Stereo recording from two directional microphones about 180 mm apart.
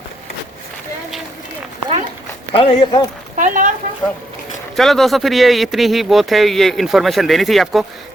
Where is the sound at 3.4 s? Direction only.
45° right (ahead or behind).